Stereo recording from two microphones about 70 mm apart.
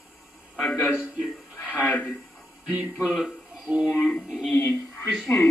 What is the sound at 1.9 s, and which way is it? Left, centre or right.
Speech, left.